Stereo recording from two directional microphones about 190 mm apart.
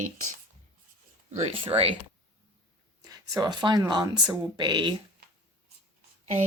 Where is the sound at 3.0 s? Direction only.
20° right (ahead or behind).